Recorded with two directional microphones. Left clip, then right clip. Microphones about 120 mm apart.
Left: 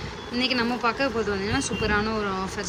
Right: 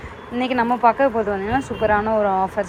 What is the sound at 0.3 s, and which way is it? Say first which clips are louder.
A woman's voice: right 5 dB; 5° left (ahead or behind).